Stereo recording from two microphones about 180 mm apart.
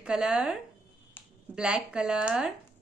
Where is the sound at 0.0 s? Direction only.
5° right (ahead or behind).